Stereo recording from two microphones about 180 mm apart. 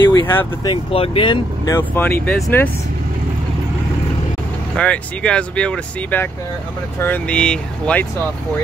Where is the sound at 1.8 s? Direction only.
10° left (ahead or behind).